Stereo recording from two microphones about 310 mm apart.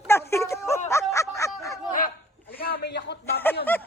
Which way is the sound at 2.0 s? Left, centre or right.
Left.